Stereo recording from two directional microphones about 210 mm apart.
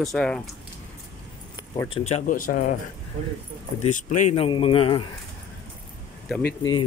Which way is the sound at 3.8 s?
35° left (ahead or behind).